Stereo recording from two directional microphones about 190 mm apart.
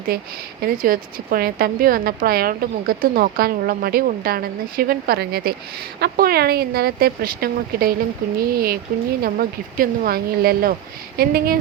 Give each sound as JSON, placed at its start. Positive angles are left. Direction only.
{"t": 0.1, "sound": "a woman's voice", "side_deg": -50}